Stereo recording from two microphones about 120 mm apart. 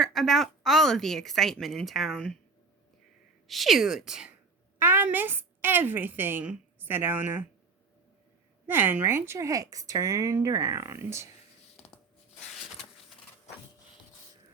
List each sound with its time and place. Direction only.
0.0 s a woman's voice: centre (ahead or behind)
3.4 s a woman's voice: centre (ahead or behind)
4.8 s a woman's voice: 15° right (ahead or behind)
8.6 s speech: 15° right (ahead or behind)